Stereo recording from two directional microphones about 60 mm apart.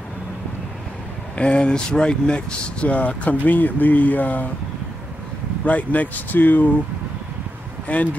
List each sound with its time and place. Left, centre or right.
1.3 s speech: centre
5.7 s speech: left
7.9 s speech: left